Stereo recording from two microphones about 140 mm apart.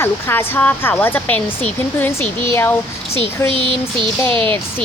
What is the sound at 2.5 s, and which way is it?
Speech, 15° left (ahead or behind).